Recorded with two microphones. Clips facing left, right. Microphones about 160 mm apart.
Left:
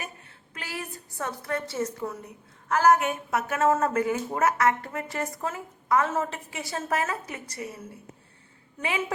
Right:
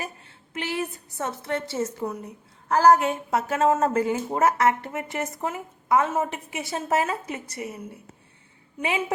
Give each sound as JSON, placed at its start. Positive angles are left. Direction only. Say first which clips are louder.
{"t": 0.0, "sound": "a woman's voice", "louder": "right 4 dB", "side_deg": -25}
{"t": 2.6, "sound": "a woman's voice", "louder": "right 3 dB", "side_deg": -35}
{"t": 8.8, "sound": "a woman's voice", "louder": "right 3 dB", "side_deg": -25}